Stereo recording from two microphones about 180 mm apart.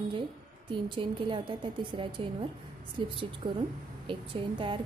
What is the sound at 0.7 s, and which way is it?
A woman's voice, 30° right (ahead or behind).